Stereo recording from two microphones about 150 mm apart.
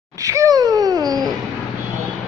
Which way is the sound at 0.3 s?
25° right (ahead or behind).